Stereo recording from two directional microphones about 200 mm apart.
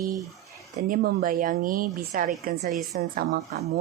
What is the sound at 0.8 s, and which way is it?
A woman's voice, 45° right (ahead or behind).